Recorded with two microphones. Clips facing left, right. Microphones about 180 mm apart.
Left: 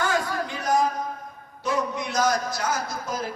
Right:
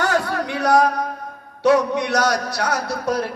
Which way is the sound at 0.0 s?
70° right (ahead or behind).